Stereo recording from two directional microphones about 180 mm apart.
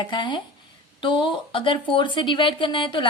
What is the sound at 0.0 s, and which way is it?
A woman's voice, 25° left (ahead or behind).